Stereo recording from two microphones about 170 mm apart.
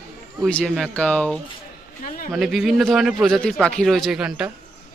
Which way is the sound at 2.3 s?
Centre (ahead or behind).